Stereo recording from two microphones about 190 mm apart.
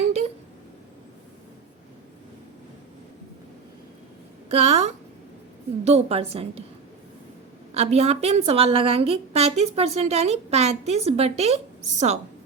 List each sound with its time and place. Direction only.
4.4 s a woman's voice: 35° right (ahead or behind)
7.7 s a woman's voice: 35° right (ahead or behind)